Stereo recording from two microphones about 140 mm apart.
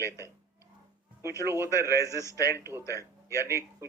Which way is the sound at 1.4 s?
20° right (ahead or behind).